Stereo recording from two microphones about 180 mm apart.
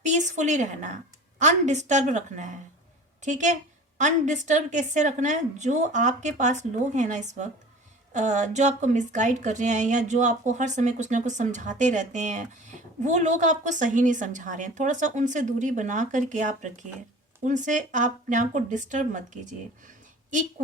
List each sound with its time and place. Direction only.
0.0 s a woman's voice: 40° right (ahead or behind)